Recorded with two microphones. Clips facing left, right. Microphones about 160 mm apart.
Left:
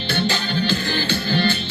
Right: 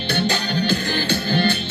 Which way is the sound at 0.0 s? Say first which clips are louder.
Right 1 dB; 50° right (ahead or behind).